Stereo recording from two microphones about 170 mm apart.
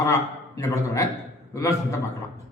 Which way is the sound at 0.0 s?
20° left (ahead or behind).